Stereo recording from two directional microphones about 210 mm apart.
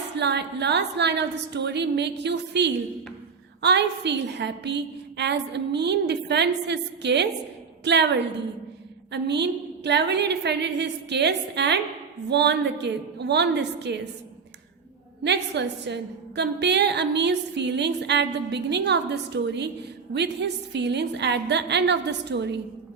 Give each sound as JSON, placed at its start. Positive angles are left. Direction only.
{"t": 0.2, "sound": "a woman's voice", "side_deg": -55}
{"t": 15.2, "sound": "a woman's voice", "side_deg": -55}